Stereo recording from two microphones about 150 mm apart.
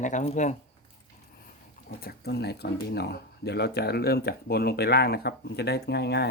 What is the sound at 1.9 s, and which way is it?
Speech, 85° left.